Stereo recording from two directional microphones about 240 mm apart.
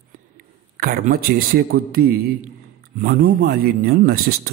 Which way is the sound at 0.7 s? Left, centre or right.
Right.